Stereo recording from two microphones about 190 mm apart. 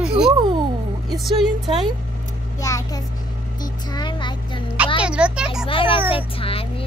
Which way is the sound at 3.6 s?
20° left (ahead or behind).